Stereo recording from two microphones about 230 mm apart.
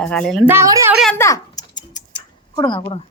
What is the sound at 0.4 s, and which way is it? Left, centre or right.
Speech, centre.